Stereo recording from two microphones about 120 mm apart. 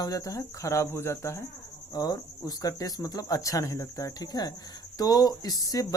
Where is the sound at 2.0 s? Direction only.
35° left (ahead or behind).